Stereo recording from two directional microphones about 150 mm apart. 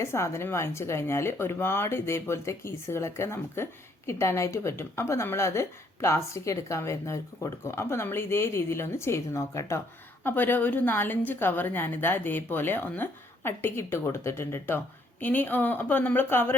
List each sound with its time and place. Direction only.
0.0 s speech: 15° left (ahead or behind)